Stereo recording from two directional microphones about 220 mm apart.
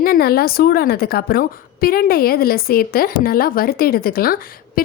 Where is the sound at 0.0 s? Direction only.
45° left (ahead or behind).